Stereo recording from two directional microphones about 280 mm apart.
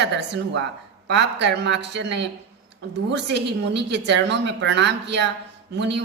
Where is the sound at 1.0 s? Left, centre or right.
Right.